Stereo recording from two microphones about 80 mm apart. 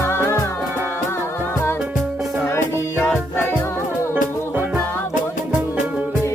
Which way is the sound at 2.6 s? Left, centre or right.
Left.